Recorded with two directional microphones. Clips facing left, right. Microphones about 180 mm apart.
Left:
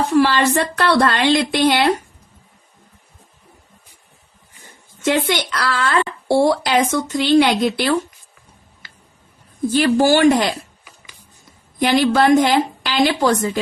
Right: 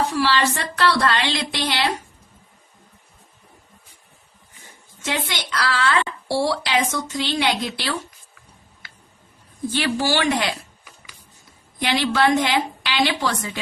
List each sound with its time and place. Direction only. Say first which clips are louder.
0.1 s speech: left 6 dB; 50° left (ahead or behind)
5.0 s speech: left 9 dB; 55° left (ahead or behind)
9.6 s speech: left 8 dB; 45° left (ahead or behind)
11.8 s speech: left 5 dB; 45° left (ahead or behind)